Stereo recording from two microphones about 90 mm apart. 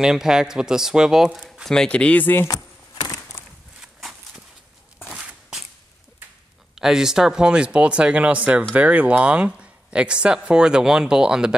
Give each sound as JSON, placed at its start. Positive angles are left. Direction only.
{"t": 0.0, "sound": "speech", "side_deg": -5}
{"t": 2.4, "sound": "keys jangling", "side_deg": 45}
{"t": 5.1, "sound": "a sound", "side_deg": -5}
{"t": 6.7, "sound": "speech", "side_deg": -5}